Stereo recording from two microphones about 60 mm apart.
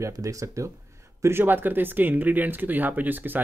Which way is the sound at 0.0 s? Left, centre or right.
Right.